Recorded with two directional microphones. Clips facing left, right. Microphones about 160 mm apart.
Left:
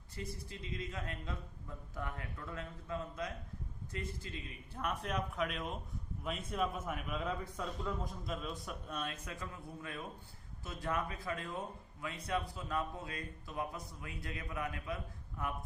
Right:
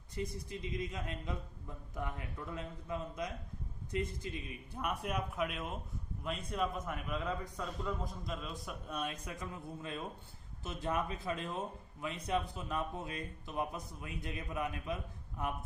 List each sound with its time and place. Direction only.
0.2 s a man's voice: 15° right (ahead or behind); by 9.0 s centre (ahead or behind)
9.0 s a man's voice: 15° right (ahead or behind)